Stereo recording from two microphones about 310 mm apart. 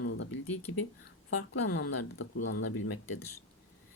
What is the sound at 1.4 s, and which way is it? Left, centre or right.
Speech, left.